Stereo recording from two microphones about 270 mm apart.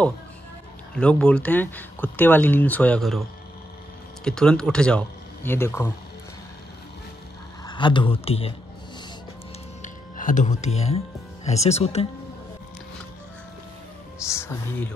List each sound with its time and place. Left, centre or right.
0.9 s speech: centre
7.6 s speech: centre
9.8 s music: left
11.4 s speech: left
14.2 s speech: centre